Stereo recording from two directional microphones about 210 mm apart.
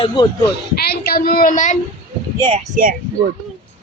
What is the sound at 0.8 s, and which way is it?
Speech, 50° left (ahead or behind).